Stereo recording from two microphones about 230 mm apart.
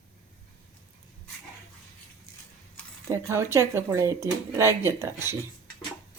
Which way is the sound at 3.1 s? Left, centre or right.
Centre.